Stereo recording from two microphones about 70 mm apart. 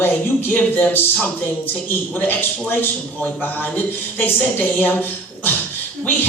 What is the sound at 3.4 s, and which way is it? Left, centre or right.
Speech, left.